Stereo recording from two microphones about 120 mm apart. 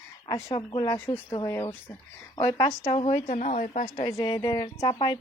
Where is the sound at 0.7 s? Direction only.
40° left (ahead or behind).